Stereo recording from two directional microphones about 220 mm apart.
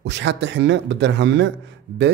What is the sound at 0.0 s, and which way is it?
Speech, 55° right (ahead or behind).